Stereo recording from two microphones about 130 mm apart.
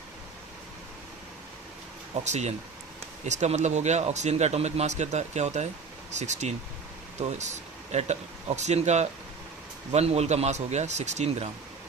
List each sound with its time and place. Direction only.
2.2 s speech: 60° right (ahead or behind)